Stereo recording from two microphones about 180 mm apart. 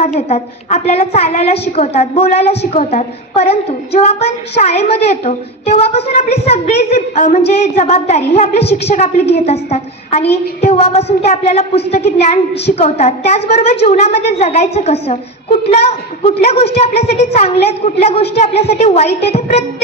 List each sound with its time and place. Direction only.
0.0 s a woman's voice: 40° left (ahead or behind)